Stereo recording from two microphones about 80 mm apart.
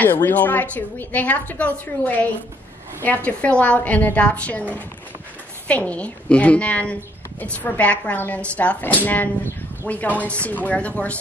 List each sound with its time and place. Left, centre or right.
0.0 s a woman's voice: left
3.3 s speech: centre